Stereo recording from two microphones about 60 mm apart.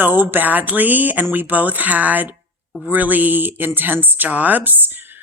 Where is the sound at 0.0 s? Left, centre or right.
Right.